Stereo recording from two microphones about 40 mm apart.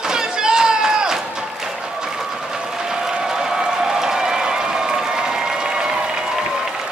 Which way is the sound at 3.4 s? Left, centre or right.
Centre.